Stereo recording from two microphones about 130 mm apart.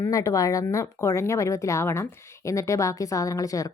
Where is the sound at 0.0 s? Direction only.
25° left (ahead or behind).